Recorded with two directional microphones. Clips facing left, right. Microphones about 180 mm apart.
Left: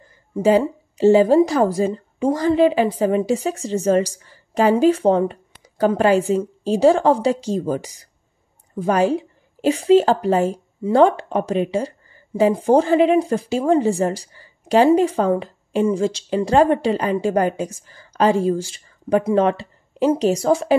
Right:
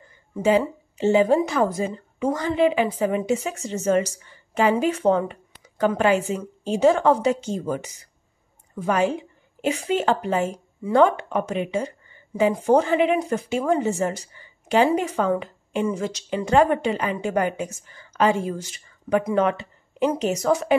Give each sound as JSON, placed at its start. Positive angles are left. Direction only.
{"t": 0.4, "sound": "speech", "side_deg": 35}